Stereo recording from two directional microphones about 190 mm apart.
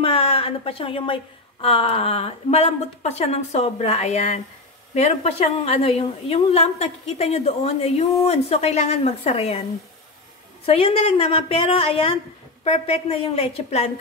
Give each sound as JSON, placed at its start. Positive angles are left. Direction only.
{"t": 0.0, "sound": "a woman's voice", "side_deg": 30}
{"t": 10.6, "sound": "a woman's voice", "side_deg": 30}